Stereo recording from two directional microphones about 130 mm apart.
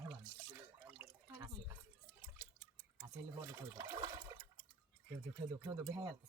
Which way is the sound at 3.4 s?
20° right (ahead or behind).